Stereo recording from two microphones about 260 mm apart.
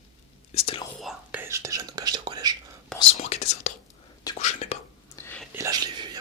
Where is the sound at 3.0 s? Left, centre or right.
Left.